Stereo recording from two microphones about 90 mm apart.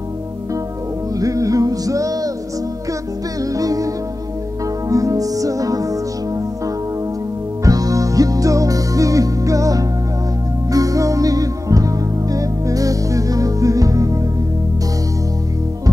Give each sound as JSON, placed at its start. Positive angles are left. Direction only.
{"t": 1.1, "sound": "music", "side_deg": -40}
{"t": 3.5, "sound": "music", "side_deg": -40}
{"t": 7.6, "sound": "music", "side_deg": -40}